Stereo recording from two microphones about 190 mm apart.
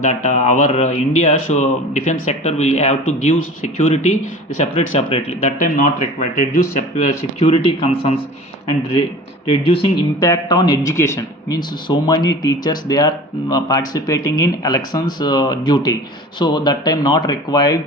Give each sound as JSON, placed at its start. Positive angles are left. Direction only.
{"t": 0.0, "sound": "speech", "side_deg": 40}
{"t": 9.5, "sound": "speech", "side_deg": 30}